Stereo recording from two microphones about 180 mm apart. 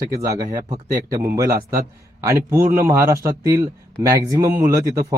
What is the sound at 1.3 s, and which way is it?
Speech, 20° right (ahead or behind).